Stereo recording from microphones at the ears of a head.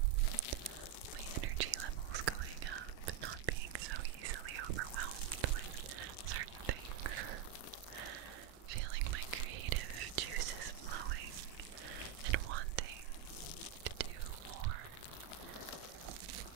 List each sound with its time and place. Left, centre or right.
1.4 s whispering: right
5.9 s a sound: right
8.6 s whispering: right